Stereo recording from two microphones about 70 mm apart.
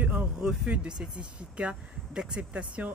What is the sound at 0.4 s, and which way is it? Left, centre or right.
Speech, centre.